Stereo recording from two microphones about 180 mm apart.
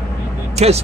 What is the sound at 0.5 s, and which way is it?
Speech, 35° right (ahead or behind).